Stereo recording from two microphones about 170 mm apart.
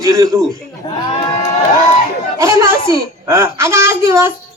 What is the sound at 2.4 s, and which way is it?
Speech, 15° right (ahead or behind).